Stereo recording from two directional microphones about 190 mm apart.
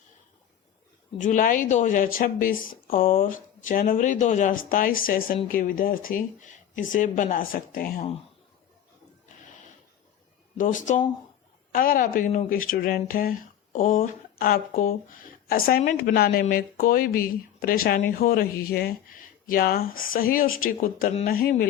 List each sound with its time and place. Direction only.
1.2 s speech: 45° left (ahead or behind)
10.6 s speech: 45° left (ahead or behind)